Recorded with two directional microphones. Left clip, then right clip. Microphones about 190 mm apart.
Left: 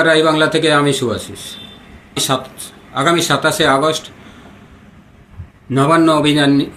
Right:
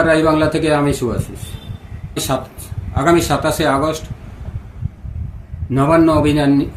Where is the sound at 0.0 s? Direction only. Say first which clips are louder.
Left 2 dB; 15° right (ahead or behind).